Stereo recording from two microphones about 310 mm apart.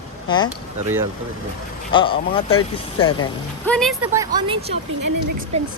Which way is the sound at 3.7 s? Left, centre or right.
Centre.